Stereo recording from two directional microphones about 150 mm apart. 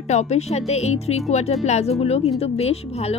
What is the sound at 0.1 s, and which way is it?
Speech, 45° left (ahead or behind).